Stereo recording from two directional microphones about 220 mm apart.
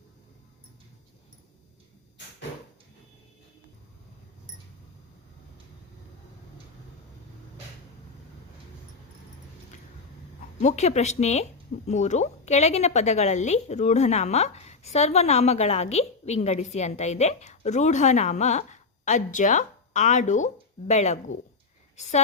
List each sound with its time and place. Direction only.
10.6 s a woman's voice: 30° left (ahead or behind)